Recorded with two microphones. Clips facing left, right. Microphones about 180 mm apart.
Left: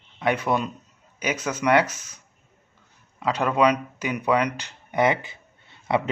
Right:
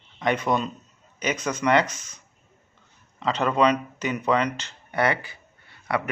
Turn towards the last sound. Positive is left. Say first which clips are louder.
# left 3 dB
turn(degrees=20)  # may be behind; listen again after turning